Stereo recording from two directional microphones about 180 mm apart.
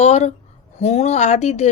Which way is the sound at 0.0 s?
40° left (ahead or behind).